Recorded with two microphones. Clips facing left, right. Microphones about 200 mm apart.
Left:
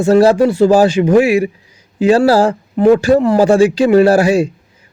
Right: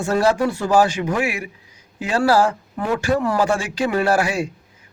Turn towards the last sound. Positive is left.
turn(degrees=35)  # may be behind; listen again after turning